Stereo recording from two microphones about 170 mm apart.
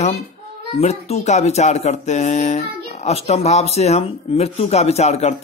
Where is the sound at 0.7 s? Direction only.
40° left (ahead or behind).